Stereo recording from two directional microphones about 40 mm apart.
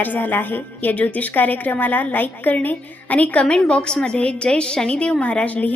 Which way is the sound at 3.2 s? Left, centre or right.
Left.